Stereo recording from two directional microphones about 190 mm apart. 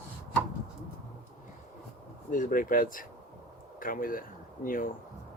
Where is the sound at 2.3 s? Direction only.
45° left (ahead or behind).